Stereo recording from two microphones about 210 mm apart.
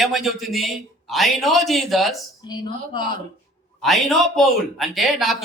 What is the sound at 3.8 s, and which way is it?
A man's voice, centre (ahead or behind).